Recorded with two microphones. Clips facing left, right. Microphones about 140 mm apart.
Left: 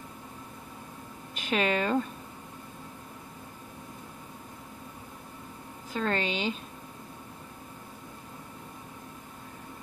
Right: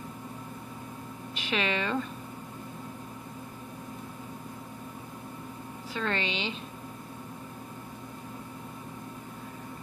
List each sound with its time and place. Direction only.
1.3 s speech: 45° left (ahead or behind)
5.9 s a woman's voice: 40° left (ahead or behind)